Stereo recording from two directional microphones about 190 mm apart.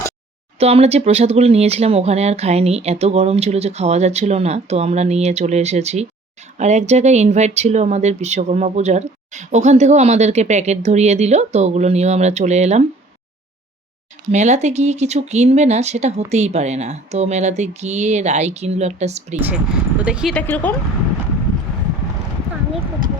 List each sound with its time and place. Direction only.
0.6 s speech: 35° right (ahead or behind)
14.3 s speech: 35° right (ahead or behind)
20.0 s speech: 5° right (ahead or behind)
20.3 s speech: 10° left (ahead or behind)